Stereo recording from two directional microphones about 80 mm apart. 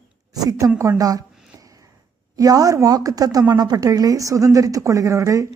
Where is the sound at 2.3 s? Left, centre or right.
Right.